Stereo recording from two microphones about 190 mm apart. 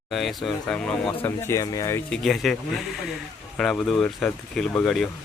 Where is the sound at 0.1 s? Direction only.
Centre (ahead or behind); by 2.0 s 15° left (ahead or behind).